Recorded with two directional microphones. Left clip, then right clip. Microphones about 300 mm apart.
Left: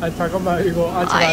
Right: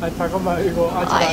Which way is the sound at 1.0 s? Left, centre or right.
Centre.